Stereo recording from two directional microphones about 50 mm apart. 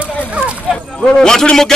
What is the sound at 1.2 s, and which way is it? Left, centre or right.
Speech, centre.